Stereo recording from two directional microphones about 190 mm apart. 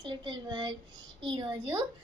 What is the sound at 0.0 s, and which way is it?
A woman's voice, 25° right (ahead or behind).